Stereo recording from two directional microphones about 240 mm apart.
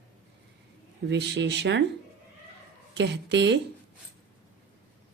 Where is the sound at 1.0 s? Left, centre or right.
Right.